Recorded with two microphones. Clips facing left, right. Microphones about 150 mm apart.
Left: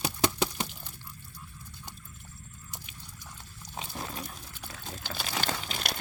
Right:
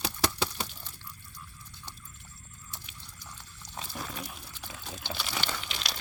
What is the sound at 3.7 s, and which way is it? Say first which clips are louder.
Wild animals: left 1 dB; 15° left (ahead or behind).